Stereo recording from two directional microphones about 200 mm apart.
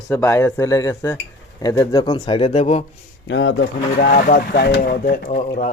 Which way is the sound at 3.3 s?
65° left (ahead or behind).